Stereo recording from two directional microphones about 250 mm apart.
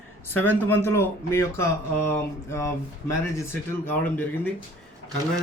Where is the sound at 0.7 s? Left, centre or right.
Centre.